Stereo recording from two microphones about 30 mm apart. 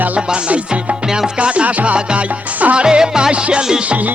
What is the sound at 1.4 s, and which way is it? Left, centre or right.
Music, right.